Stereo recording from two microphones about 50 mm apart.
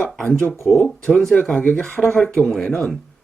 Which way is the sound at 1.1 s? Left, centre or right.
Centre.